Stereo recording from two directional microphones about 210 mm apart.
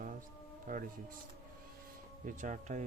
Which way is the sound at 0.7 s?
40° right (ahead or behind).